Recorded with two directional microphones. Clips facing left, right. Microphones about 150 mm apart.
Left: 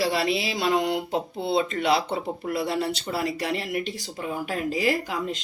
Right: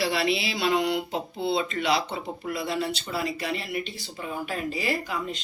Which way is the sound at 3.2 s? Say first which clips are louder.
Left 4 dB; 70° left (ahead or behind).